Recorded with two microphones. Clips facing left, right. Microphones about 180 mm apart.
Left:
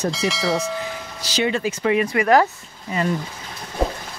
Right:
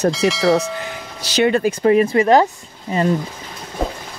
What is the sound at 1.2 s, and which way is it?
Speech, 60° right (ahead or behind).